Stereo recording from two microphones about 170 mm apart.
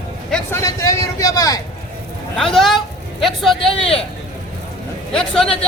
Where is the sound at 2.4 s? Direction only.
Centre (ahead or behind).